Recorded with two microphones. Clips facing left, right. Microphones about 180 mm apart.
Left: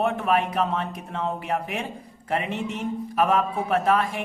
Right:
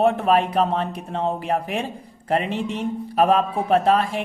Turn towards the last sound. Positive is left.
turn(degrees=-30)  # may be behind; listen again after turning